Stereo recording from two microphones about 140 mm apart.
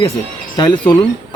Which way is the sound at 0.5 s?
30° left (ahead or behind).